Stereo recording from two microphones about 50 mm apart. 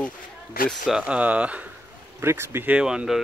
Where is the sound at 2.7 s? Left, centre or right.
Centre.